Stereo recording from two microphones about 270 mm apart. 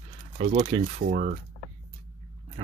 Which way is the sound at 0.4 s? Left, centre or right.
Right.